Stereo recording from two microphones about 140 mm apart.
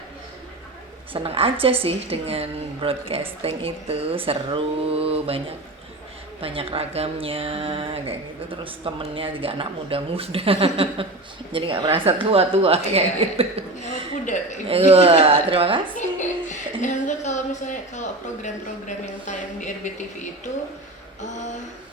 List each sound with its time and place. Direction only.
1.1 s a woman's voice: 40° right (ahead or behind)
6.4 s a woman's voice: 40° right (ahead or behind)
14.7 s a woman's voice: 45° right (ahead or behind)
16.0 s music: 60° left (ahead or behind)
21.2 s a sound: 60° left (ahead or behind)